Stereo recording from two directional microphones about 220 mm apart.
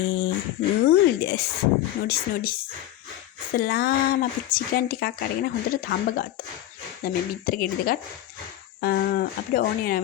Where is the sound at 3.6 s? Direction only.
45° left (ahead or behind).